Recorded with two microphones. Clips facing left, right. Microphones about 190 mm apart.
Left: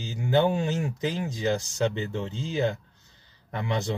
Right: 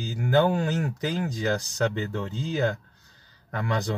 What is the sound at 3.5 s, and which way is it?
Speech, 25° left (ahead or behind).